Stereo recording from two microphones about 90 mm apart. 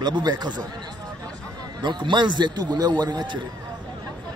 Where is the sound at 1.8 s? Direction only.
60° right (ahead or behind).